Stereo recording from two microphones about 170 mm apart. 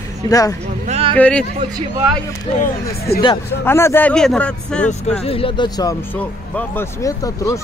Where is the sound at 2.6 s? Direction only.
65° left (ahead or behind).